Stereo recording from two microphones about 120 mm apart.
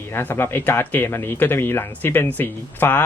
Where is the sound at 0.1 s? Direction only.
20° left (ahead or behind).